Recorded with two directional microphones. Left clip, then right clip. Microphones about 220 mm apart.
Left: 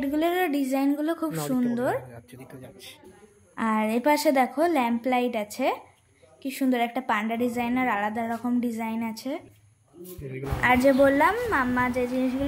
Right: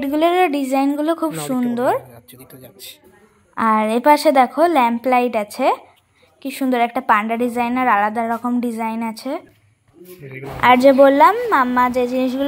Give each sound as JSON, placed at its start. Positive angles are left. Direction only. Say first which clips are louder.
{"t": 0.0, "sound": "a woman's voice", "louder": "right 9 dB", "side_deg": -10}
{"t": 10.6, "sound": "a woman's voice", "louder": "right 9 dB", "side_deg": -20}